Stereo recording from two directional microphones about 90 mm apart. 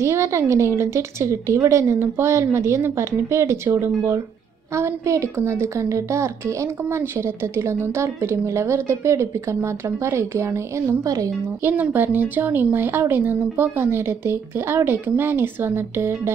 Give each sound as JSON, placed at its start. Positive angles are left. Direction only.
{"t": 0.0, "sound": "a woman's voice", "side_deg": -35}
{"t": 11.7, "sound": "speech", "side_deg": -20}